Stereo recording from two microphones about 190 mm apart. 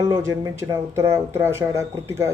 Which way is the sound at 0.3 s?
15° right (ahead or behind).